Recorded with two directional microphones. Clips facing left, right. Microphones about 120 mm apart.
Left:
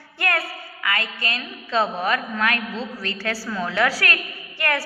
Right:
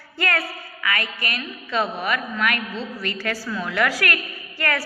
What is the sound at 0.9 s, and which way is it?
A woman's voice, 30° left (ahead or behind).